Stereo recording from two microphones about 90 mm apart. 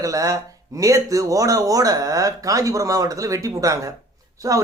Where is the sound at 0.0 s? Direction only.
40° right (ahead or behind).